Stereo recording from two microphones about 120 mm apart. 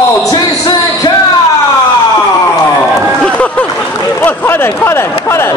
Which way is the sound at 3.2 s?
10° left (ahead or behind).